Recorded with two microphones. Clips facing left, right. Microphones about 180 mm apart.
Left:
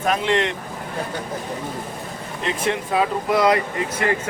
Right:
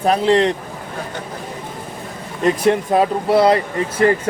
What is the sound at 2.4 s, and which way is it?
Speech, 40° right (ahead or behind).